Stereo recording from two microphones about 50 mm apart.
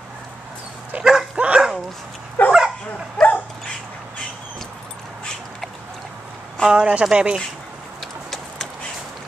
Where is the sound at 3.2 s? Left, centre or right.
Centre.